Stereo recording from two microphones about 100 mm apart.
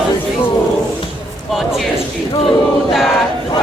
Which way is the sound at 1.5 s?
Centre (ahead or behind).